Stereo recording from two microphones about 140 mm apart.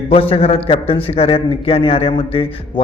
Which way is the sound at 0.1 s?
40° left (ahead or behind).